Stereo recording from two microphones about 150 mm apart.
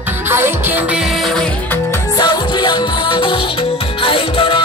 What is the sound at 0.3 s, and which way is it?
Music, 15° right (ahead or behind).